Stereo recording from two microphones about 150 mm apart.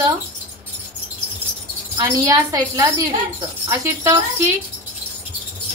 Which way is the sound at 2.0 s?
25° right (ahead or behind).